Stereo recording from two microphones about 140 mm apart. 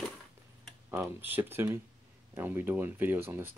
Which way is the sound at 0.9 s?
15° right (ahead or behind).